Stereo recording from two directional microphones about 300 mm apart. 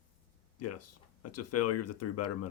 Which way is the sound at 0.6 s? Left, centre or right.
Left.